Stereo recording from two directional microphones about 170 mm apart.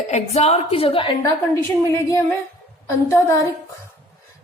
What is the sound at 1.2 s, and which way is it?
A woman's voice, 20° left (ahead or behind).